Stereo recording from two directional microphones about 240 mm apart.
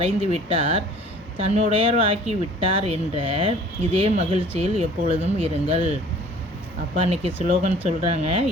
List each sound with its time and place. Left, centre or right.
0.0 s speech: right
6.9 s speech: right